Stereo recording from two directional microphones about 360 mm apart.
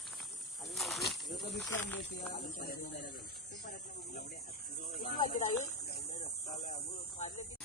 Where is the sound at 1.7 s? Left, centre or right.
Centre.